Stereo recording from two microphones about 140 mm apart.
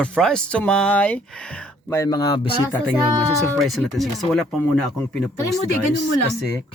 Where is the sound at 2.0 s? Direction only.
30° left (ahead or behind).